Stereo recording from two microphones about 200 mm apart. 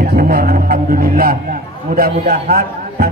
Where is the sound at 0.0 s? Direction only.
50° right (ahead or behind).